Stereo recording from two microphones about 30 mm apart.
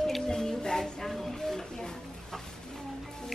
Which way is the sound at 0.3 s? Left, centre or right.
Centre.